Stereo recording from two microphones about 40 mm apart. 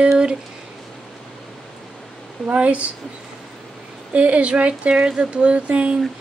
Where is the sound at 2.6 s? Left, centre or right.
Right.